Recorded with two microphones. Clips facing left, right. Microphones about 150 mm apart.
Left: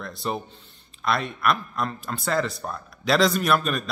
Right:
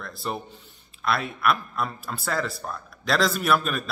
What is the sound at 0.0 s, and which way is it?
A man's voice, centre (ahead or behind).